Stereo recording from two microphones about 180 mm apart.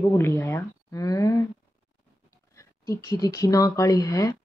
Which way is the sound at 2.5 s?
20° left (ahead or behind).